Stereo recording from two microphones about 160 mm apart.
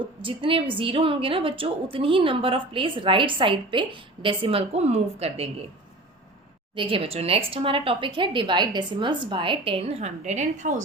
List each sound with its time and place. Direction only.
0.2 s a woman's voice: 30° right (ahead or behind)
6.7 s a woman's voice: 35° right (ahead or behind); by 10.8 s 50° right (ahead or behind)